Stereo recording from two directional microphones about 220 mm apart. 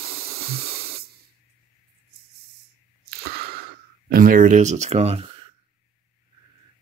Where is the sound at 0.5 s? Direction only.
45° right (ahead or behind).